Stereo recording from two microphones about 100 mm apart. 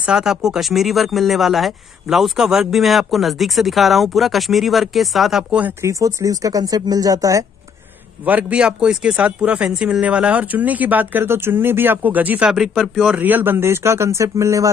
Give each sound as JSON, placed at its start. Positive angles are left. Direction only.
{"t": 0.0, "sound": "speech", "side_deg": -5}
{"t": 5.8, "sound": "speech", "side_deg": -30}
{"t": 8.3, "sound": "speech", "side_deg": -15}
{"t": 12.4, "sound": "speech", "side_deg": -5}